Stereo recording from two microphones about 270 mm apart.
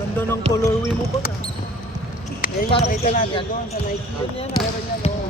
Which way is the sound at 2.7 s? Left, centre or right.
Left.